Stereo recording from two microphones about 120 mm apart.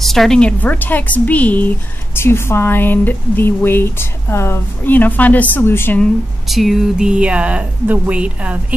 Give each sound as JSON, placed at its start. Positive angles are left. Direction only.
{"t": 0.0, "sound": "a woman's voice", "side_deg": 0}
{"t": 6.4, "sound": "speech", "side_deg": 0}